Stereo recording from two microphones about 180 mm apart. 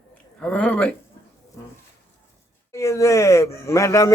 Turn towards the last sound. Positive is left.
turn(degrees=15)  # may be behind; listen again after turning